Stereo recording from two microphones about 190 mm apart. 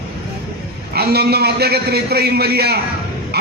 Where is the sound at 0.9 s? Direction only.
55° right (ahead or behind).